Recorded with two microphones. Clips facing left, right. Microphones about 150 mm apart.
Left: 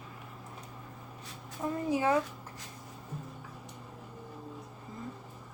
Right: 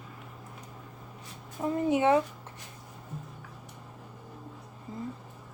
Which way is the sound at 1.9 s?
25° right (ahead or behind).